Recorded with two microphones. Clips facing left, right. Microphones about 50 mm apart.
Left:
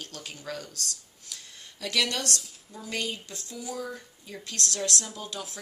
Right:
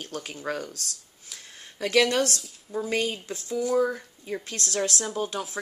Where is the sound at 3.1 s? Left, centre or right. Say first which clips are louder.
Right 6 dB; right.